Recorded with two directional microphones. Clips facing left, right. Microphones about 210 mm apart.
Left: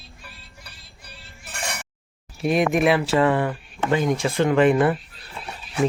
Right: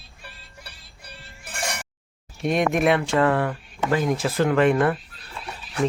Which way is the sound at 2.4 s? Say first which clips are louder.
Left 1 dB; centre (ahead or behind).